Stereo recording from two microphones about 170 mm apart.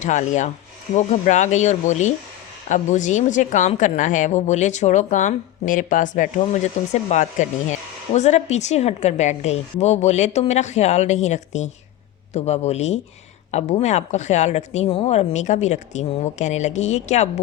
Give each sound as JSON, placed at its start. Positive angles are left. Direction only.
{"t": 0.0, "sound": "a woman's voice", "side_deg": 45}